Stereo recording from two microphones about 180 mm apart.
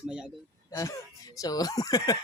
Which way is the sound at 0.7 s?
20° left (ahead or behind).